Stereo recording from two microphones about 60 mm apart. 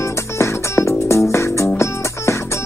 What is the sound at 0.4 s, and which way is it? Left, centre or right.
Music, left.